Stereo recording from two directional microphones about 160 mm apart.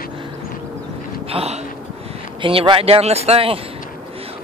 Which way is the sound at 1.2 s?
40° right (ahead or behind).